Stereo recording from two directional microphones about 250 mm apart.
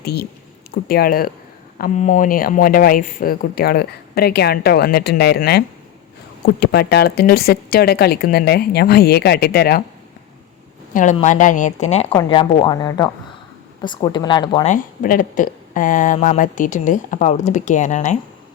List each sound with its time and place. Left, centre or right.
0.0 s speech: left
10.9 s speech: left
14.7 s speech: left